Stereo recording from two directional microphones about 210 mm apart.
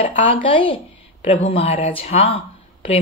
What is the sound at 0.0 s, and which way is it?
Speech, 25° left (ahead or behind).